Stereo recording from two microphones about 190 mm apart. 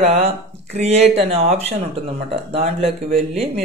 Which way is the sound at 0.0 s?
35° right (ahead or behind).